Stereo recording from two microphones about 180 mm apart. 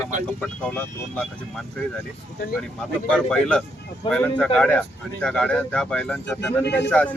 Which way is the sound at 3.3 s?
5° left (ahead or behind).